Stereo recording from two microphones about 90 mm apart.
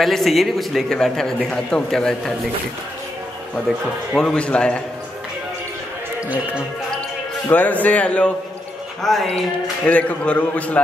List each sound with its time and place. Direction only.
0.0 s a man's voice: centre (ahead or behind)
4.1 s a man's voice: 10° left (ahead or behind)
7.4 s a man's voice: 20° left (ahead or behind)
9.0 s a man's voice: centre (ahead or behind)
9.8 s a man's voice: 15° left (ahead or behind)